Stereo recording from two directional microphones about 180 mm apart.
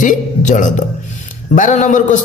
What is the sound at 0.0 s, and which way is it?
A man's voice, 45° left (ahead or behind).